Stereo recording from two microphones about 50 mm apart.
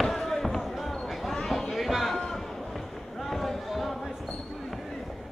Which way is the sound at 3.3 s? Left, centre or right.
Centre.